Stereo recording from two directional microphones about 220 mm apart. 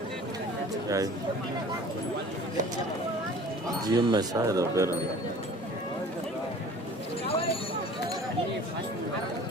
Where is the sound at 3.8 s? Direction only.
15° right (ahead or behind).